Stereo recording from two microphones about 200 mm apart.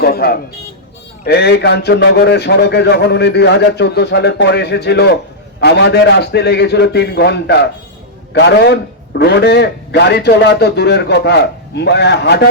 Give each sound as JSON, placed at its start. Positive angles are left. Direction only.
{"t": 0.0, "sound": "a man's voice", "side_deg": 50}